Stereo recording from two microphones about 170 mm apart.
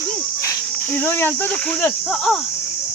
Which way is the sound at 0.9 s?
10° left (ahead or behind).